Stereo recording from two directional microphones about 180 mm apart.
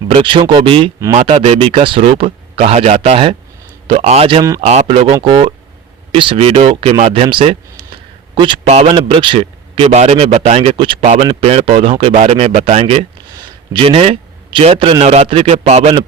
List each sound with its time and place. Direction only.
0.1 s a man's voice: 30° right (ahead or behind)
11.0 s a man's voice: 40° right (ahead or behind)